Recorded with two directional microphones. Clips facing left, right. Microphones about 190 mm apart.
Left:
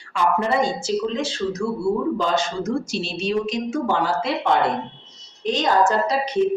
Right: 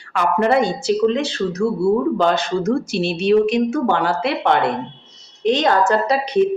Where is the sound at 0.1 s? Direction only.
65° right (ahead or behind).